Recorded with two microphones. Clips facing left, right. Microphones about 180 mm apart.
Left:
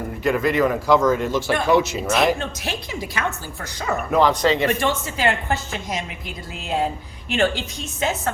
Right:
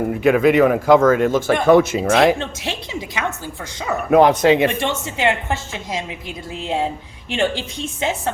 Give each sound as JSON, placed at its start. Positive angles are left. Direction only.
{"t": 0.2, "sound": "speech", "side_deg": -60}
{"t": 2.4, "sound": "a woman's voice", "side_deg": -25}
{"t": 4.1, "sound": "speech", "side_deg": -55}
{"t": 4.8, "sound": "a woman's voice", "side_deg": -25}